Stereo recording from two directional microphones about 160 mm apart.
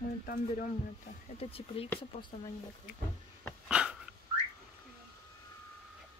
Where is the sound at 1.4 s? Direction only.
40° left (ahead or behind).